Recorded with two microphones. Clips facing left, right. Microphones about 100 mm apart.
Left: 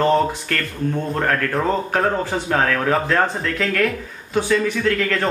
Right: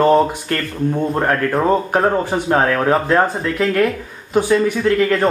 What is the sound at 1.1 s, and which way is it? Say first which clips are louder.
Speech: right 3 dB; 20° right (ahead or behind).